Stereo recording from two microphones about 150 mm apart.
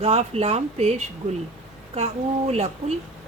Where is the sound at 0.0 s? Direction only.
40° right (ahead or behind).